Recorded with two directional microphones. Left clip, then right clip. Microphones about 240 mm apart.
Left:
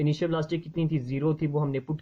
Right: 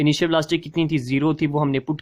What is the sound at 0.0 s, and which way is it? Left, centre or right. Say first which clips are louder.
Speech: right 9 dB; right.